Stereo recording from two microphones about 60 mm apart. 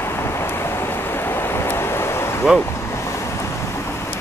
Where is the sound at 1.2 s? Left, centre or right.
Left.